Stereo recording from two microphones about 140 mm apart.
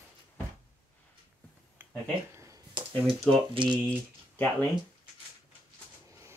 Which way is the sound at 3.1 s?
Centre (ahead or behind).